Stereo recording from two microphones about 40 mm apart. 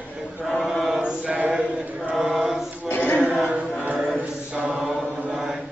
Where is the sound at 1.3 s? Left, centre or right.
Right.